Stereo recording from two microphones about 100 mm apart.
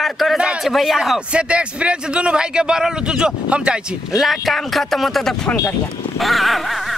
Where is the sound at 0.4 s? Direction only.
10° right (ahead or behind).